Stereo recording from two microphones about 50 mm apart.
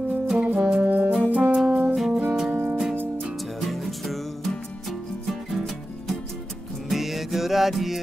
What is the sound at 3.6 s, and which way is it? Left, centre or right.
Music, centre.